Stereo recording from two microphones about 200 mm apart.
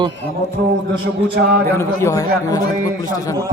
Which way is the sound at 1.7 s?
15° left (ahead or behind).